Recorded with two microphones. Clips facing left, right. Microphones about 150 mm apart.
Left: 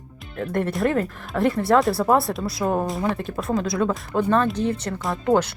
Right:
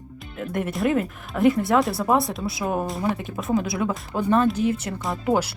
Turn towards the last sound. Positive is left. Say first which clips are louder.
# left 2 dB
turn(degrees=-10)  # may be behind; listen again after turning